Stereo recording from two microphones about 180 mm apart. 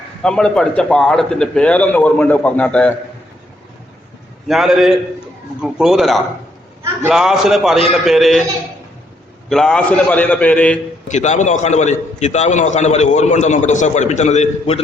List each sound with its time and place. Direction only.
0.2 s a man's voice: 5° left (ahead or behind)
4.4 s a man's voice: centre (ahead or behind)
9.5 s a man's voice: 5° left (ahead or behind)
11.1 s a man's voice: 40° left (ahead or behind)